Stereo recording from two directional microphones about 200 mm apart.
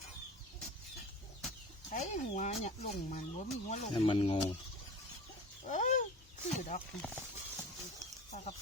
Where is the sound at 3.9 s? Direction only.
25° left (ahead or behind).